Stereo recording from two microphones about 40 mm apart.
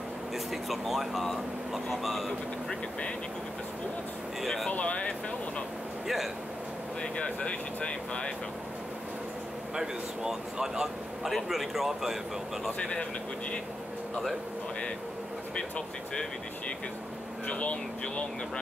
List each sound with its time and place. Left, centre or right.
0.5 s speech: centre
4.7 s speech: left
6.0 s speech: centre
7.0 s speech: left
9.8 s speech: centre
17.5 s speech: left